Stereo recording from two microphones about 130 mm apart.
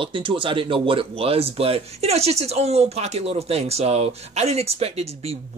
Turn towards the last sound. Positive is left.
turn(degrees=-50)  # may be behind; listen again after turning